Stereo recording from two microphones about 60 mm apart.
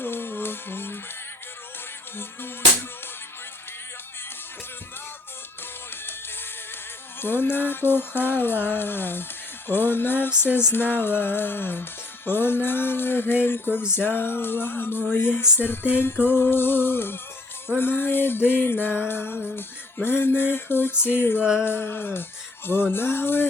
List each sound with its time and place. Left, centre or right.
0.0 s music: left
7.2 s music: left